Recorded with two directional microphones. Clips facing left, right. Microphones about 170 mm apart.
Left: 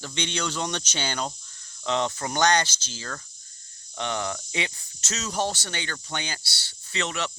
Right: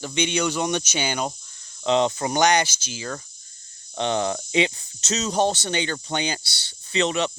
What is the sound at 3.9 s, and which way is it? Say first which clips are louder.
Speech: right 6 dB; 25° right (ahead or behind).